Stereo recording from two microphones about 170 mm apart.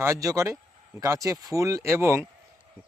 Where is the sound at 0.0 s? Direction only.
20° right (ahead or behind).